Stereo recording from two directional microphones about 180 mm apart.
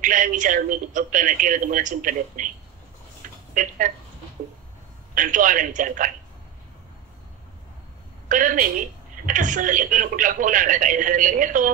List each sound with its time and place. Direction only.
0.0 s a woman's voice: 45° right (ahead or behind)
3.5 s a woman's voice: 45° right (ahead or behind)
5.1 s a woman's voice: 45° right (ahead or behind)
8.3 s a woman's voice: 45° right (ahead or behind)